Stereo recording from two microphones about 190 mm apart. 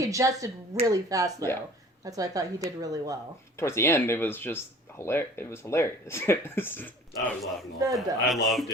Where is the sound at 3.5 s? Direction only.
15° left (ahead or behind).